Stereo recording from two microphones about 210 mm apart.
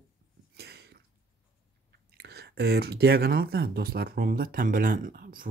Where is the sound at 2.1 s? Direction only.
50° right (ahead or behind).